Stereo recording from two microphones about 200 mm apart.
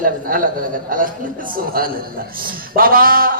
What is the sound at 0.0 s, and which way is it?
A man's voice, 45° right (ahead or behind).